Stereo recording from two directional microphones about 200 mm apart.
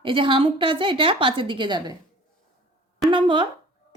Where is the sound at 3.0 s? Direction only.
25° right (ahead or behind).